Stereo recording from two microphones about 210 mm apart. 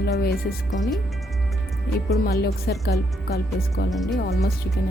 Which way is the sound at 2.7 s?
50° left (ahead or behind).